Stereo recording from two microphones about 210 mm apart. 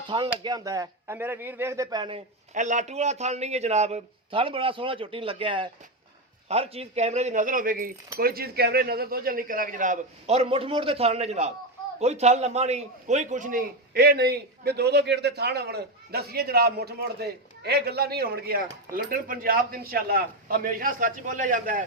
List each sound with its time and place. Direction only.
0.1 s a man's voice: 20° right (ahead or behind); by 21.8 s 40° right (ahead or behind)